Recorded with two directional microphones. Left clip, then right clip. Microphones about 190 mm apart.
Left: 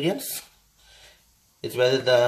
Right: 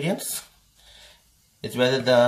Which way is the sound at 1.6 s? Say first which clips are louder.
Left 1 dB; 30° left (ahead or behind).